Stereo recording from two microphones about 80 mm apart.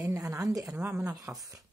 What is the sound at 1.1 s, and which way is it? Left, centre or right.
Speech, right.